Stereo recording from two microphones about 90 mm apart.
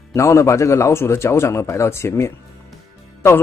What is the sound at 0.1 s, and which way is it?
A man's voice, 35° left (ahead or behind).